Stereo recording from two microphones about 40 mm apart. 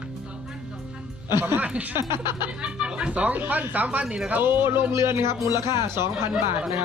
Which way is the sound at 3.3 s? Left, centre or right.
Right.